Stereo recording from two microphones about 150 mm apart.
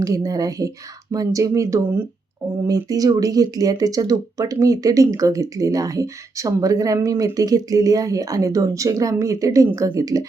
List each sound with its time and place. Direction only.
0.0 s speech: 25° right (ahead or behind)